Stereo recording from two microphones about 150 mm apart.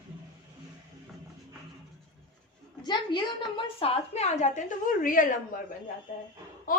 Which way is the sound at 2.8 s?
30° left (ahead or behind).